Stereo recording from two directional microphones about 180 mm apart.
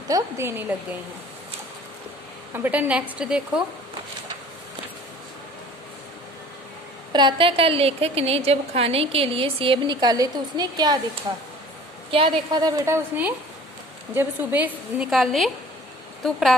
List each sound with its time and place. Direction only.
0.1 s a woman's voice: 15° right (ahead or behind)
2.5 s a woman's voice: 10° right (ahead or behind)
7.1 s a woman's voice: 25° right (ahead or behind)
12.1 s a woman's voice: 25° right (ahead or behind); by 16.6 s centre (ahead or behind)